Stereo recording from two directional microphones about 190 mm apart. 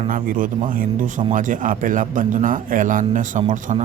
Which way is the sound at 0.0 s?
45° right (ahead or behind).